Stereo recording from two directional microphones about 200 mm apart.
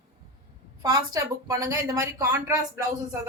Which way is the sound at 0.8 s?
20° right (ahead or behind).